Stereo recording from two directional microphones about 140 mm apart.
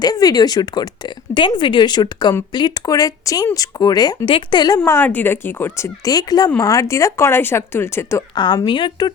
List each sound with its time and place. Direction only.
0.0 s speech: 25° left (ahead or behind)
4.9 s speech: 15° left (ahead or behind)
8.4 s speech: 35° left (ahead or behind)